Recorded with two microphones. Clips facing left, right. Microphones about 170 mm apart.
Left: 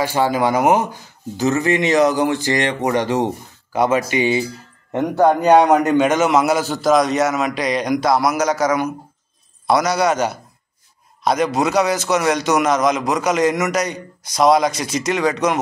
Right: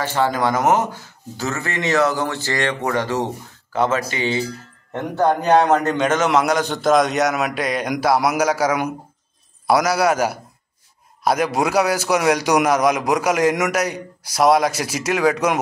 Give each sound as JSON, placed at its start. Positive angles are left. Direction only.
{"t": 0.0, "sound": "a man's voice", "side_deg": 10}